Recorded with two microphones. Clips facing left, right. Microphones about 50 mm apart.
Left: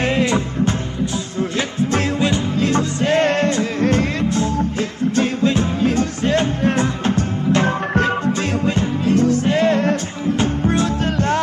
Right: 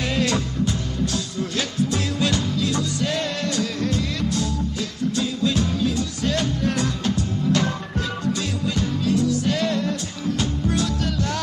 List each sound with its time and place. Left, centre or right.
0.1 s music: left
1.8 s music: left
2.5 s music: left